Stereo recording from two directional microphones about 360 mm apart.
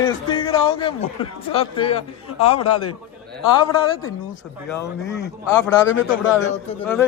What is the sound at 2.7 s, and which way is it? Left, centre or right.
Speech, left.